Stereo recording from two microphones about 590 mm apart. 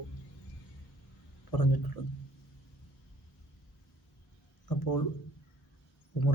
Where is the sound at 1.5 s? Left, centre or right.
Left.